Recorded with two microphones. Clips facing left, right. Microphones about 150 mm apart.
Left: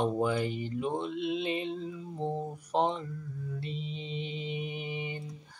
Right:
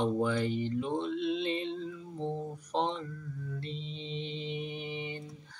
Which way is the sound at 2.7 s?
10° left (ahead or behind).